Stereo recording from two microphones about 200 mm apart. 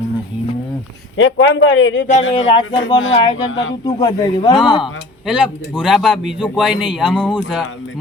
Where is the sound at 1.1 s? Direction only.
70° left (ahead or behind).